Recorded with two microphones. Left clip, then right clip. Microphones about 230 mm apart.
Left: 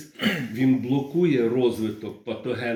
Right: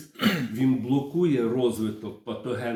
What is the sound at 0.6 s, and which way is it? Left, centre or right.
Speech, centre.